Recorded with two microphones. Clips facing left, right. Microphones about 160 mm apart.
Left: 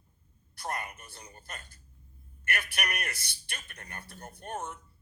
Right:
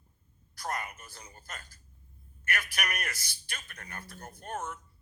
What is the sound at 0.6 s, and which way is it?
A man's voice, 25° left (ahead or behind).